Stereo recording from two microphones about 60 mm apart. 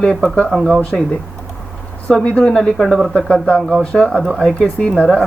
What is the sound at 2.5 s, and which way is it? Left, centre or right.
Speech, centre.